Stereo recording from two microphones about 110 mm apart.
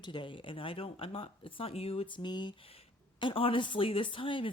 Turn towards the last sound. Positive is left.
turn(degrees=50)  # may be behind; listen again after turning